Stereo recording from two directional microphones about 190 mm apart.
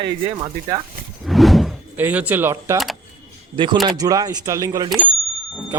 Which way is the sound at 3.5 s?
25° right (ahead or behind).